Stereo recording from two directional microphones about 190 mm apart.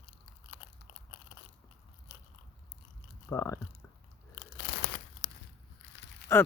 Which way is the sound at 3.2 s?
15° left (ahead or behind).